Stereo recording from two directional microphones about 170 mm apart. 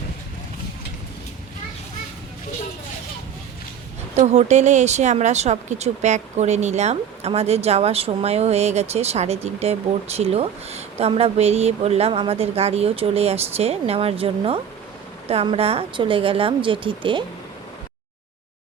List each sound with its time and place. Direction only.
4.1 s speech: 40° right (ahead or behind)